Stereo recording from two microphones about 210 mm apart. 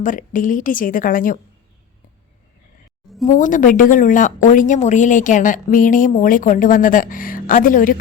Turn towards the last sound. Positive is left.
turn(degrees=40)  # may be behind; listen again after turning